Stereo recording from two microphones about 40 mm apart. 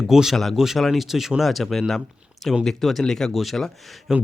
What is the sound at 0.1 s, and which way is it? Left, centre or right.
Speech, centre.